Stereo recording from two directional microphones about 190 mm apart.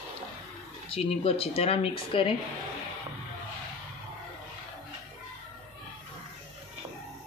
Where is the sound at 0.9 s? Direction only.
30° left (ahead or behind).